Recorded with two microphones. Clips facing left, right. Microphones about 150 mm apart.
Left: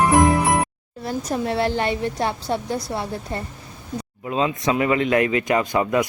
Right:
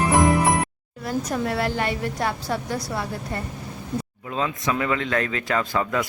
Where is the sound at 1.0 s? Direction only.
25° left (ahead or behind).